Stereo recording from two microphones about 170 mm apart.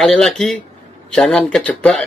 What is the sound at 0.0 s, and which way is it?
Speech, centre (ahead or behind).